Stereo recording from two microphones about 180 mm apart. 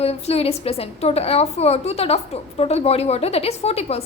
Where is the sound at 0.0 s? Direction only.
35° left (ahead or behind).